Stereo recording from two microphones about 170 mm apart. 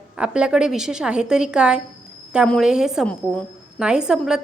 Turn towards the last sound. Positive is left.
turn(degrees=-5)  # may be behind; listen again after turning